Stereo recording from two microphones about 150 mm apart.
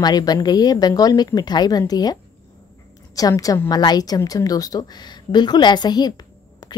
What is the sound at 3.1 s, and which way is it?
Speech, 25° left (ahead or behind).